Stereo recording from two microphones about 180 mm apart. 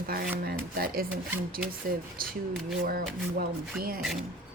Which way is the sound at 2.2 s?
55° right (ahead or behind).